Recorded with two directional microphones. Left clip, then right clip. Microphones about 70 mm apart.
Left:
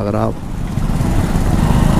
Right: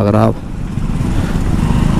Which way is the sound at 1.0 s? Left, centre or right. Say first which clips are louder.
Left 1 dB; left.